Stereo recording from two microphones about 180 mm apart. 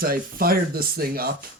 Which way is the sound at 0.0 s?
55° right (ahead or behind).